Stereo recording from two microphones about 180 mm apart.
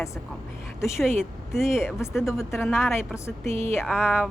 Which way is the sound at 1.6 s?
15° left (ahead or behind).